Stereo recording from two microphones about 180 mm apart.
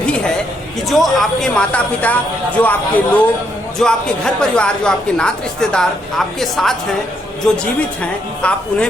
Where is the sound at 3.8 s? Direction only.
5° left (ahead or behind).